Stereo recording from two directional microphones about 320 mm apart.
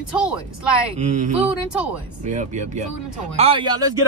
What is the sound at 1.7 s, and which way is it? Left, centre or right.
Speech, centre.